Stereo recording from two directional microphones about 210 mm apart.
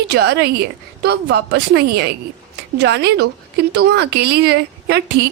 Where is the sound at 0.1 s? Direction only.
55° right (ahead or behind).